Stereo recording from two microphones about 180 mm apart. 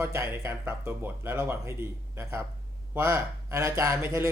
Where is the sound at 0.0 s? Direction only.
15° right (ahead or behind).